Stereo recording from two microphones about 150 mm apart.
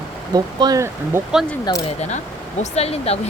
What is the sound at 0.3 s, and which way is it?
Speech, 25° right (ahead or behind).